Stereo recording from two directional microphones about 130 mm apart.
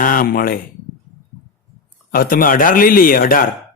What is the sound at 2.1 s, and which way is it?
A man's voice, 90° left.